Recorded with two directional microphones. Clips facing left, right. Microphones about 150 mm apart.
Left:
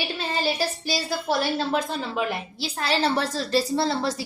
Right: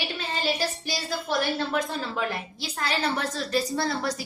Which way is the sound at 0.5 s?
30° left (ahead or behind).